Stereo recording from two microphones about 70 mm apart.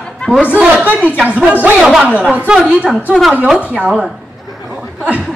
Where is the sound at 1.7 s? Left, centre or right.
Centre.